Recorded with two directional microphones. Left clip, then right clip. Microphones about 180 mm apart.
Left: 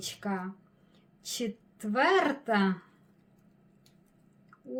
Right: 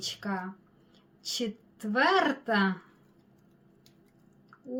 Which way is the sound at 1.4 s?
30° left (ahead or behind).